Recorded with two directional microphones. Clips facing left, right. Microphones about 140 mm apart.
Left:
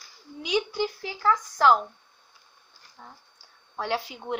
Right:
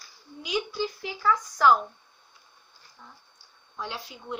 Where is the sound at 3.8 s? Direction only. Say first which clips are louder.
Left 7 dB; 70° left (ahead or behind).